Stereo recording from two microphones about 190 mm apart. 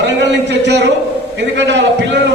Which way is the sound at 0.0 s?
65° right (ahead or behind).